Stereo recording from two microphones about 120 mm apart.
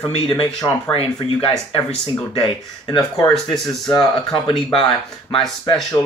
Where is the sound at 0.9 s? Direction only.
55° left (ahead or behind).